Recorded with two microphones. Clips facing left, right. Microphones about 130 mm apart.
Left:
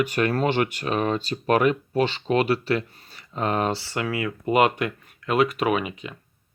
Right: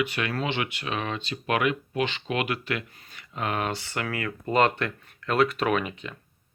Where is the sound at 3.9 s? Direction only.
20° left (ahead or behind).